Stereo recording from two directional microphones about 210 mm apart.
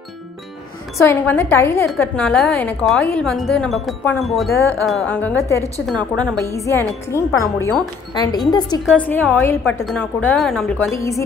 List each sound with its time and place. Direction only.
0.9 s a woman's voice: 10° left (ahead or behind)
8.8 s a woman's voice: 5° left (ahead or behind)